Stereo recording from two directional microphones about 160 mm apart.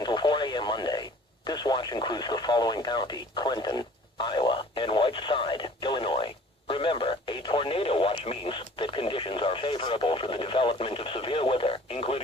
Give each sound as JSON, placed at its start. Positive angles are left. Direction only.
{"t": 0.0, "sound": "radio", "side_deg": 30}